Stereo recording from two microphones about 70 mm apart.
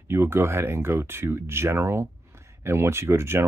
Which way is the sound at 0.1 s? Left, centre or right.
Right.